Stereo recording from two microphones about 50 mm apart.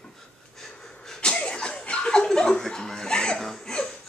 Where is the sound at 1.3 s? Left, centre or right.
Centre.